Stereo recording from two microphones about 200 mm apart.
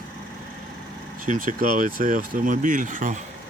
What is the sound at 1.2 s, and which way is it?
Speech, 40° right (ahead or behind).